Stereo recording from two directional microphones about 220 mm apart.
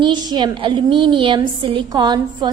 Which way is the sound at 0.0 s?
20° right (ahead or behind).